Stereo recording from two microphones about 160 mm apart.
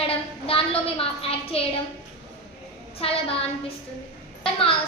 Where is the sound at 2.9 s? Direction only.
35° left (ahead or behind).